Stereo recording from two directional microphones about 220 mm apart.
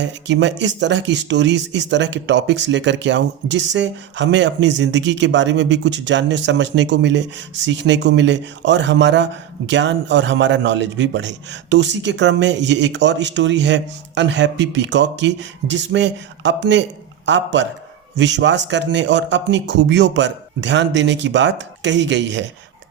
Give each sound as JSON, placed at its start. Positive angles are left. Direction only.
{"t": 0.0, "sound": "speech", "side_deg": -55}